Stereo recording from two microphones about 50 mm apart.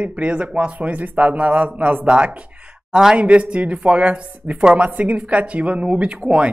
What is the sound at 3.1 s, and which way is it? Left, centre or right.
Speech, right.